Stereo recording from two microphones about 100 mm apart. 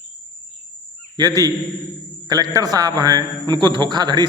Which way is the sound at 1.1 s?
40° right (ahead or behind).